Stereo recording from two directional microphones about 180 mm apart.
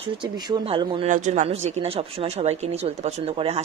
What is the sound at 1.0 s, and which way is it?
Speech, 45° right (ahead or behind).